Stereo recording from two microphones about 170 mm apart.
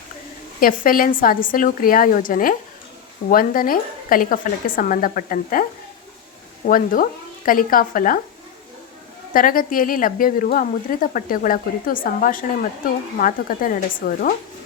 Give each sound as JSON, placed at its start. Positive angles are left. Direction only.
{"t": 0.6, "sound": "speech", "side_deg": 55}
{"t": 6.7, "sound": "speech", "side_deg": 55}
{"t": 9.3, "sound": "speech", "side_deg": 55}